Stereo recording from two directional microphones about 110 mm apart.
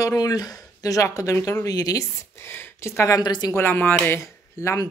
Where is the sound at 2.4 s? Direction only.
25° left (ahead or behind).